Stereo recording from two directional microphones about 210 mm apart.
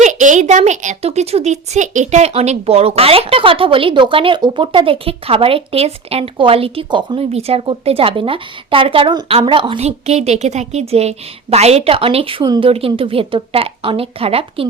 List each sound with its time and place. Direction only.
0.0 s a woman's voice: 35° right (ahead or behind)